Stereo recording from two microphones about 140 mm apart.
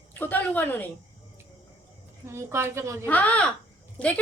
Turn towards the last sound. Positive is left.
turn(degrees=10)  # may be behind; listen again after turning